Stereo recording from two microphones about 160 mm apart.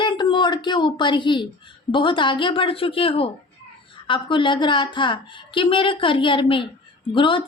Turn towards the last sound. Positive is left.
turn(degrees=30)  # may be behind; listen again after turning